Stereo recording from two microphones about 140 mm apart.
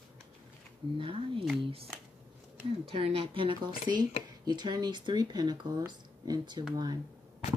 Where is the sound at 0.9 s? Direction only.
40° right (ahead or behind).